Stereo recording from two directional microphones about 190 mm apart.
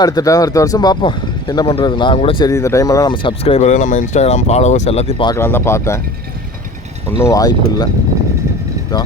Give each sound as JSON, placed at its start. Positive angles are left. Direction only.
{"t": 0.0, "sound": "speech", "side_deg": 20}
{"t": 5.4, "sound": "speech", "side_deg": 10}
{"t": 7.2, "sound": "speech", "side_deg": 15}